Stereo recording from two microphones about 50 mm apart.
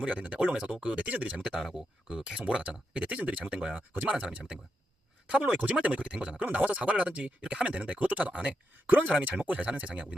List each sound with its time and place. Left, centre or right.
0.0 s speech: right
1.6 s speech: centre; by 10.2 s right